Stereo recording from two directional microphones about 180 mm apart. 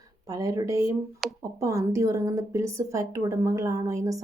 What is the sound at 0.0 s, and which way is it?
Speech, 20° right (ahead or behind).